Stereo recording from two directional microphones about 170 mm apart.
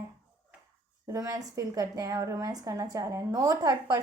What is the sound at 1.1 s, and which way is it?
A woman's voice, 20° right (ahead or behind).